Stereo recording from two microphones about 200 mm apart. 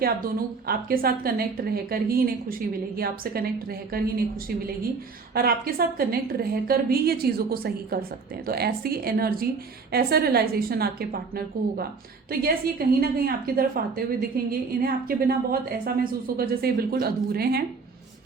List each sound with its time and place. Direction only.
0.0 s a woman's voice: 45° right (ahead or behind)
5.3 s a woman's voice: 50° right (ahead or behind)
16.4 s a woman's voice: 50° right (ahead or behind)